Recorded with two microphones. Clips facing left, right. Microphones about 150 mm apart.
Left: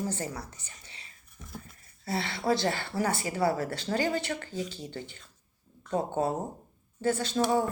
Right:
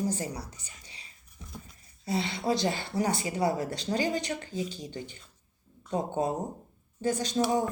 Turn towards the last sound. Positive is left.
turn(degrees=-15)  # may be behind; listen again after turning